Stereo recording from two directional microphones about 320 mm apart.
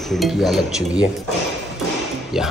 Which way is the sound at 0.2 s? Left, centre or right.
Centre.